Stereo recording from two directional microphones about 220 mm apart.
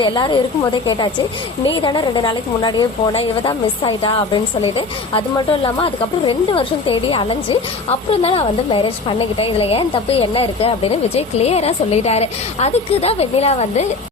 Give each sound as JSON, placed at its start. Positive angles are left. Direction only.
{"t": 0.0, "sound": "a woman's voice", "side_deg": 20}
{"t": 5.1, "sound": "a woman's voice", "side_deg": 25}